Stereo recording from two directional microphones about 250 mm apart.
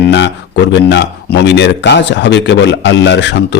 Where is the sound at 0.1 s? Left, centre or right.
Left.